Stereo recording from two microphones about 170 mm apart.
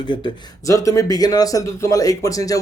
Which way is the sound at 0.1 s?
30° left (ahead or behind).